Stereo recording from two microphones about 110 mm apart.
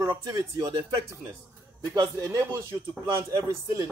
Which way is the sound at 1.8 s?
35° right (ahead or behind).